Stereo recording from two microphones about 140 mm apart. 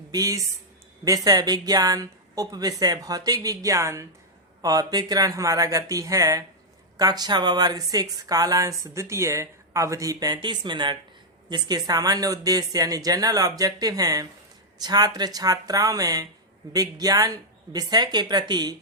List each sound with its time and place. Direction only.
0.1 s speech: 25° right (ahead or behind)